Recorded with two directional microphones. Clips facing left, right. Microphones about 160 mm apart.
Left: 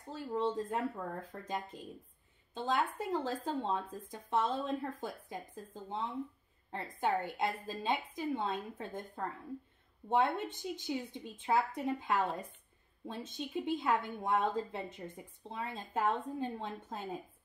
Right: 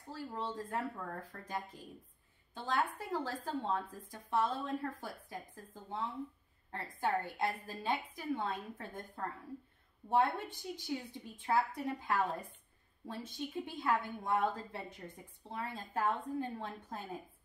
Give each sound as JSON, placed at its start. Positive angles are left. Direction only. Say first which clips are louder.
{"t": 0.4, "sound": "speech", "louder": "left 6 dB", "side_deg": 20}